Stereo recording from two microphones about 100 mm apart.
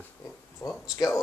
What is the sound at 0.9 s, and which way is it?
Speech, 35° left (ahead or behind).